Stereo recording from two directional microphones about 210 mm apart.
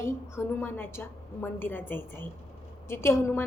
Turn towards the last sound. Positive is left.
turn(degrees=10)  # may be behind; listen again after turning